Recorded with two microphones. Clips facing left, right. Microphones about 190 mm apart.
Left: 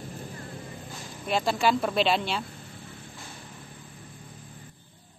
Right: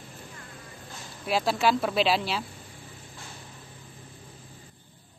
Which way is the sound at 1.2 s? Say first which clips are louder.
Even; 5° right (ahead or behind).